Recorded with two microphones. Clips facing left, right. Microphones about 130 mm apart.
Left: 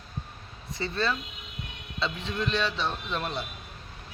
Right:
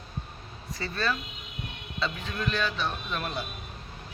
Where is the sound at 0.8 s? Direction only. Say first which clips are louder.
Left 1 dB; 25° left (ahead or behind).